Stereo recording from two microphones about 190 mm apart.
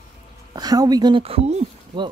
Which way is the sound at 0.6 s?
20° right (ahead or behind).